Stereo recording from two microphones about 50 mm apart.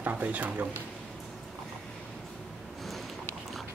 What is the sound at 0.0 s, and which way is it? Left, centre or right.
Speech, right.